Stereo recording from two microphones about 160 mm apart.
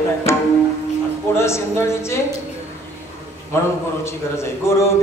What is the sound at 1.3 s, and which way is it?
Speech, 15° left (ahead or behind).